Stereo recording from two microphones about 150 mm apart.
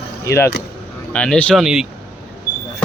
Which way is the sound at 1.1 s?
5° left (ahead or behind).